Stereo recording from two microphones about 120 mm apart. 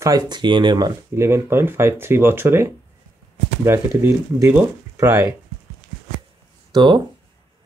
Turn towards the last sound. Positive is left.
turn(degrees=-40)  # may be behind; listen again after turning